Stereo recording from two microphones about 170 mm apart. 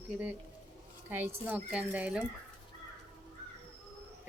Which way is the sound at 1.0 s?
10° right (ahead or behind).